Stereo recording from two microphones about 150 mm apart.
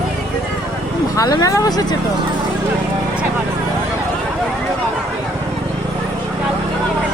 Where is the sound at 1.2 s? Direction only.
25° left (ahead or behind).